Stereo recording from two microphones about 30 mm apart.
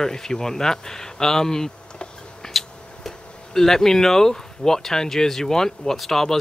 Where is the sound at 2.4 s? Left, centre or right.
Centre.